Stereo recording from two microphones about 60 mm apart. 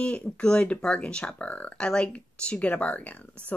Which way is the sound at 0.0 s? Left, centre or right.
Centre.